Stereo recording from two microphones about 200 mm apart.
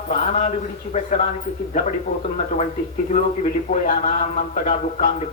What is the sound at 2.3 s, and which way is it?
Speech, 35° left (ahead or behind).